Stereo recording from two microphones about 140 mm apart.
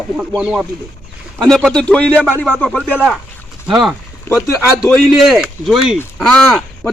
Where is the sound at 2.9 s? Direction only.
10° right (ahead or behind).